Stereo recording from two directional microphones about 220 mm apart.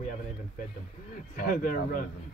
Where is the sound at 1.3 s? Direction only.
40° left (ahead or behind).